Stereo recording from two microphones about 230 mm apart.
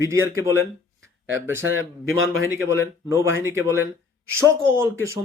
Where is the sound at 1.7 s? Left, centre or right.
Right.